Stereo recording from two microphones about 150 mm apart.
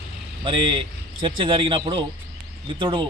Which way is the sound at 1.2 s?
35° right (ahead or behind).